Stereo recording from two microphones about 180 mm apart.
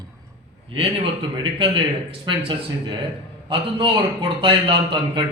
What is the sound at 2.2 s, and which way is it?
A man's voice, 30° right (ahead or behind).